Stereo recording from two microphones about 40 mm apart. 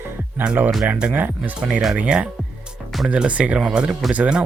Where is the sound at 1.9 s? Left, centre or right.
Right.